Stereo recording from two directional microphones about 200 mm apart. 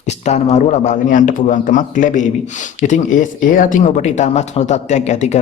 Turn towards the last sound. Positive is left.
turn(degrees=35)  # may be behind; listen again after turning